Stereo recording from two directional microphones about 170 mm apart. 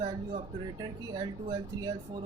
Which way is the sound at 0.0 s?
25° right (ahead or behind).